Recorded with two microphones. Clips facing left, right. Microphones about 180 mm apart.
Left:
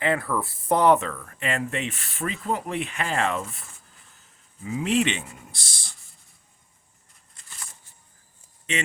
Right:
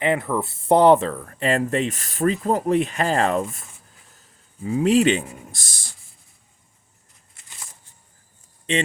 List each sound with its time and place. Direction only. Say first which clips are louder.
0.0 s speech: right 3 dB; 20° right (ahead or behind); by 3.6 s 40° right (ahead or behind)
4.6 s speech: right 6 dB; 40° right (ahead or behind)